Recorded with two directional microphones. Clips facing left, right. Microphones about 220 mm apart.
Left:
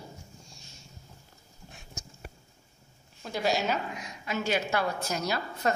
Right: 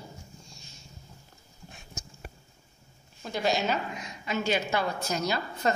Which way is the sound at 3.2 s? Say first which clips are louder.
Right 1 dB; 5° left (ahead or behind).